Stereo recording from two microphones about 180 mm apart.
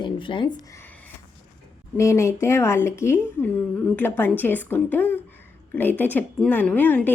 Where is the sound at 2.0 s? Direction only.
15° left (ahead or behind).